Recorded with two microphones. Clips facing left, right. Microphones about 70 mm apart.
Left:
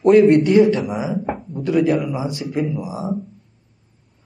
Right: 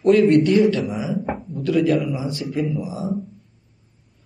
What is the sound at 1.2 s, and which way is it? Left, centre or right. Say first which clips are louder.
Speech: left 1 dB; centre.